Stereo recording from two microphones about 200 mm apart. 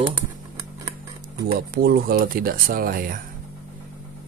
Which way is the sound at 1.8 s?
50° right (ahead or behind).